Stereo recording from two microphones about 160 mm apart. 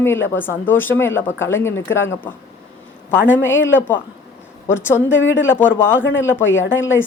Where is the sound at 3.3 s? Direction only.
15° left (ahead or behind).